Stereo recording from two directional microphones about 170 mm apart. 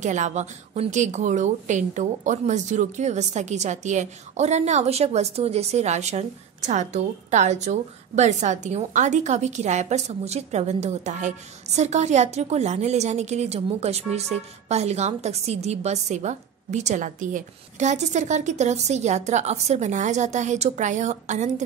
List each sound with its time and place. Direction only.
0.0 s a woman's voice: 45° right (ahead or behind)